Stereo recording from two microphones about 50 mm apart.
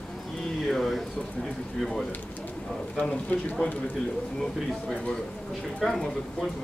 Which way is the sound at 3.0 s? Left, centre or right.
Left.